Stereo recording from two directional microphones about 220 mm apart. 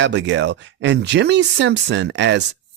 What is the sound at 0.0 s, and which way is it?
Speech, 55° right (ahead or behind).